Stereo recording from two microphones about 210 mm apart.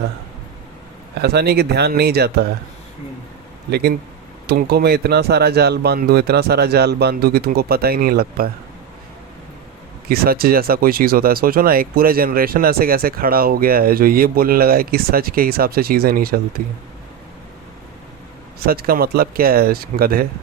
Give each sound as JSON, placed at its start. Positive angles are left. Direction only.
{"t": 1.2, "sound": "speech", "side_deg": -50}
{"t": 3.7, "sound": "speech", "side_deg": -50}
{"t": 10.1, "sound": "speech", "side_deg": -45}
{"t": 18.6, "sound": "speech", "side_deg": -45}